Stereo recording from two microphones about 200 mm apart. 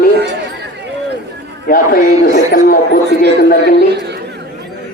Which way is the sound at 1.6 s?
45° left (ahead or behind).